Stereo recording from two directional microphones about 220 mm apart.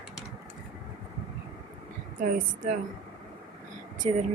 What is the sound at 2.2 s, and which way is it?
Speech, 35° right (ahead or behind).